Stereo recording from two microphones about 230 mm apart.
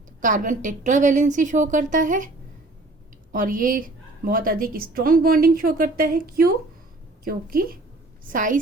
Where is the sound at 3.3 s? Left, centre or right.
Right.